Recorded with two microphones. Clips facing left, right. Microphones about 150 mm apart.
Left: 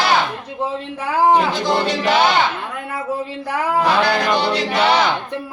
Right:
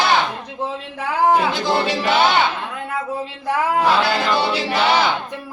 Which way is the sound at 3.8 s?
Centre (ahead or behind).